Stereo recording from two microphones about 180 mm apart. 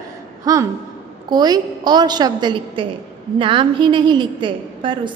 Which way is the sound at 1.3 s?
20° right (ahead or behind).